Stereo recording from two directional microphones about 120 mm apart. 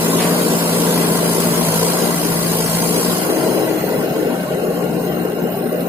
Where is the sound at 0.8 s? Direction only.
15° right (ahead or behind).